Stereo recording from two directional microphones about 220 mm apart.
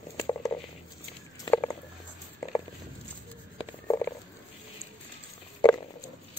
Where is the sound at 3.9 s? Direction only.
10° left (ahead or behind).